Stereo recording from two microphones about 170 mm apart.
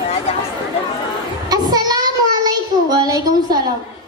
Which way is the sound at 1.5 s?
20° right (ahead or behind).